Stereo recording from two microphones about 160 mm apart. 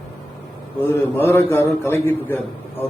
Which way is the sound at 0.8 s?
15° left (ahead or behind).